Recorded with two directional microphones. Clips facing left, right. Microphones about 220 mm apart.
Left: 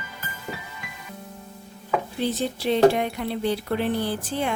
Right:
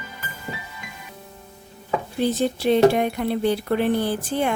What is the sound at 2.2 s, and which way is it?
Speech, 50° right (ahead or behind).